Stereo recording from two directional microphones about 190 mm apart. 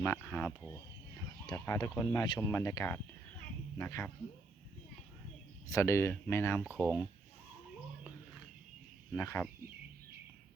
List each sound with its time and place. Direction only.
0.0 s speech: 10° left (ahead or behind)
5.6 s speech: 15° left (ahead or behind)
6.7 s speech: 10° right (ahead or behind)
9.1 s speech: 15° left (ahead or behind)